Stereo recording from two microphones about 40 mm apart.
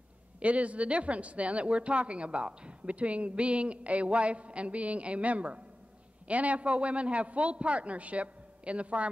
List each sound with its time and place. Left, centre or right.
0.4 s speech: right